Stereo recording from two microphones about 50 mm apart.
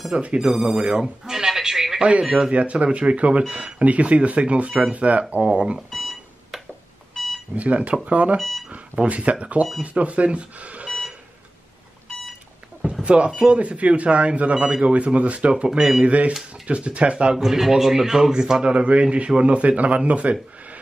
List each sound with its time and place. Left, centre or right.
0.1 s speech: centre
0.6 s speech: centre
2.0 s speech: right
2.2 s speech: centre
2.5 s speech: right
5.4 s speech: centre
5.9 s alarm clock: centre
7.5 s speech: right
8.4 s speech: centre
8.7 s speech: right
13.0 s speech: right
16.1 s speech: right
17.4 s speech: centre; by 20.3 s right